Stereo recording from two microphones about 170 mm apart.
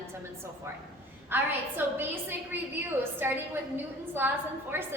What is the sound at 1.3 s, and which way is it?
A woman's voice, 10° right (ahead or behind).